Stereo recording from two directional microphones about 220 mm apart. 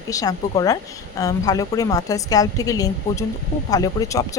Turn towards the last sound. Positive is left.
turn(degrees=15)  # may be behind; listen again after turning